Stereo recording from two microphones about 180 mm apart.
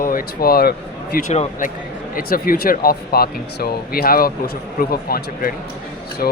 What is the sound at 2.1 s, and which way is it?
Speech, 50° left (ahead or behind).